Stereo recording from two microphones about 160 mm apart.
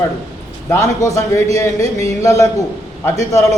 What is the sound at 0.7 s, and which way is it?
A man's voice, 20° left (ahead or behind).